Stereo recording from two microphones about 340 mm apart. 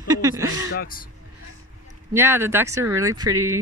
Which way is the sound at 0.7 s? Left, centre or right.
Left.